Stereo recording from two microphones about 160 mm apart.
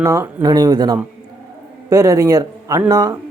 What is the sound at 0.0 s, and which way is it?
A man's voice, 15° right (ahead or behind).